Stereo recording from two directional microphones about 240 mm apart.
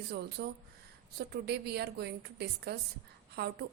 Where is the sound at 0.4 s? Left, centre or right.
Right.